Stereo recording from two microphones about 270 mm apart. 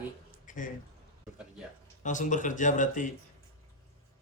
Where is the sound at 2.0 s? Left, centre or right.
Left.